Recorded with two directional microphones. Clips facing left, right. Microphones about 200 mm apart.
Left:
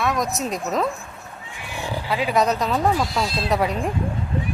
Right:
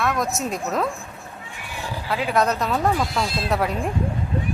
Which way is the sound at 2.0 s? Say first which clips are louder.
Left 1 dB; centre (ahead or behind).